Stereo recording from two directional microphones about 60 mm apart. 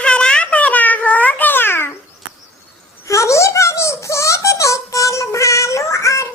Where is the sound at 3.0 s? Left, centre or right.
Left.